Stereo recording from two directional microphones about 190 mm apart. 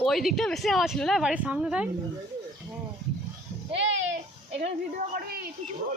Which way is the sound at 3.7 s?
80° right.